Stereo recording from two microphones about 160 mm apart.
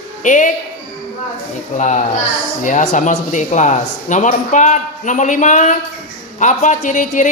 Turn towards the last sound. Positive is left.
turn(degrees=50)  # may be behind; listen again after turning